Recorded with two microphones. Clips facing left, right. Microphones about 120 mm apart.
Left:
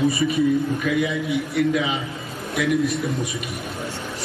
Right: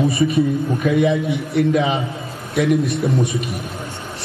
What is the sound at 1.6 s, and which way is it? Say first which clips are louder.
Speech: right 5 dB; 45° right (ahead or behind).